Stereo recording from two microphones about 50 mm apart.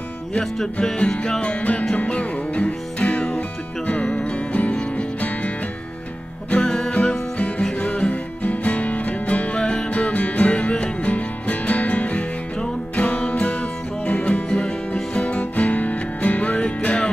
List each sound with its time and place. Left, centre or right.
0.9 s music: centre
6.5 s music: centre